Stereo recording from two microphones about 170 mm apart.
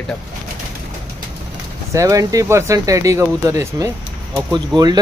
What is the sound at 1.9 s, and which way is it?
Speech, 20° right (ahead or behind).